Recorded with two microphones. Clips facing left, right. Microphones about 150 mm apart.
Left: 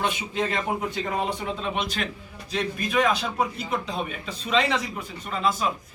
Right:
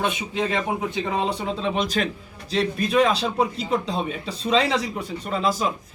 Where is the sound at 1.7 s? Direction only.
40° right (ahead or behind).